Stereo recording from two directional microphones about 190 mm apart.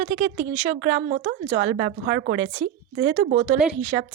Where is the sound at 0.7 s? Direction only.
55° right (ahead or behind).